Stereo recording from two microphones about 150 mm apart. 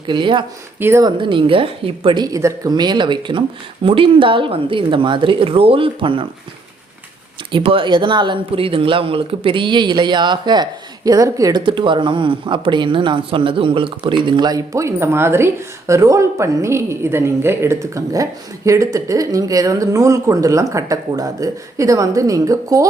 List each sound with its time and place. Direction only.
0.1 s a woman's voice: 30° right (ahead or behind)
0.8 s speech: 15° right (ahead or behind)
1.0 s a woman's voice: 35° right (ahead or behind)
7.5 s speech: 35° right (ahead or behind)